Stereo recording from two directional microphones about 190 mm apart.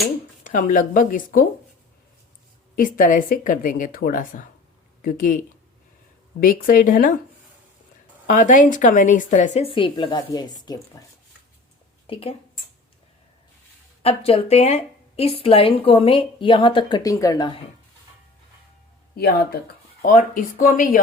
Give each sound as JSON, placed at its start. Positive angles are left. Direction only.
{"t": 0.4, "sound": "speech", "side_deg": 45}
{"t": 2.7, "sound": "speech", "side_deg": 45}
{"t": 6.4, "sound": "speech", "side_deg": 45}
{"t": 8.3, "sound": "a woman's voice", "side_deg": 45}
{"t": 12.0, "sound": "speech", "side_deg": 30}
{"t": 14.0, "sound": "a woman's voice", "side_deg": 30}
{"t": 19.1, "sound": "speech", "side_deg": 55}